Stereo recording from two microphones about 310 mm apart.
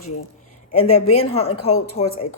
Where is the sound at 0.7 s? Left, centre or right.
Left.